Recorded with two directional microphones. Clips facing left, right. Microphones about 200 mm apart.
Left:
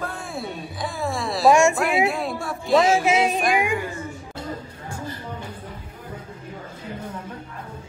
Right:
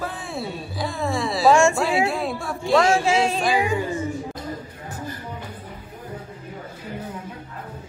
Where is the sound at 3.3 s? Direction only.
15° left (ahead or behind).